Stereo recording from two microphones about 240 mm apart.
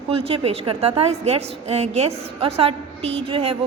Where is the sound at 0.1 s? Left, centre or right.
Right.